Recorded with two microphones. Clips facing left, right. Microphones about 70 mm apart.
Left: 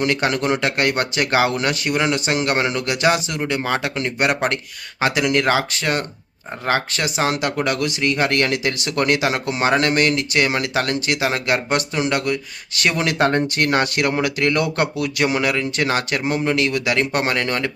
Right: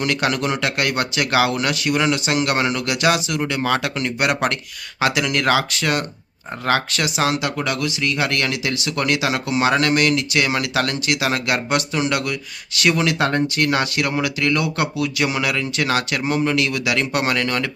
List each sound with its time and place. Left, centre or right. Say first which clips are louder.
0.0 s speech: left 1 dB; left
3.5 s speech: even; left
7.3 s speech: left 2 dB; left